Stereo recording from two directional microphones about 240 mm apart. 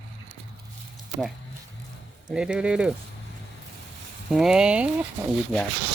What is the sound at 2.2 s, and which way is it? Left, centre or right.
Speech, centre.